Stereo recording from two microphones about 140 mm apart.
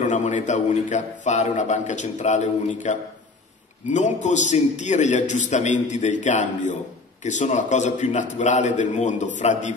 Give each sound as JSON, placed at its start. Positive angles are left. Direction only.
{"t": 0.0, "sound": "a man's voice", "side_deg": 60}